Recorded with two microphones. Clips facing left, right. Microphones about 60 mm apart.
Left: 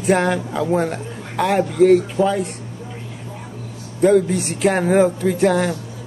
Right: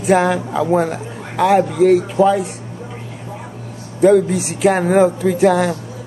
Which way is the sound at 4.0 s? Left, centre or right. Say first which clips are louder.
Right 3 dB; centre.